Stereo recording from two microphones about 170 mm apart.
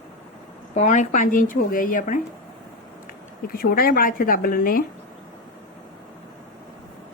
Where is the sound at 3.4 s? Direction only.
60° left (ahead or behind).